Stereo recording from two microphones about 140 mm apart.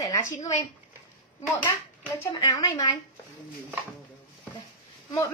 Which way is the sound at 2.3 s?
25° left (ahead or behind).